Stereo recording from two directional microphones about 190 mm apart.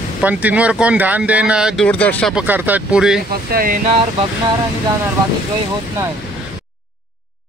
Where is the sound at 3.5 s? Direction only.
50° right (ahead or behind).